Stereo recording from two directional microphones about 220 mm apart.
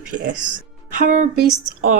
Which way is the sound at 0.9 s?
35° right (ahead or behind).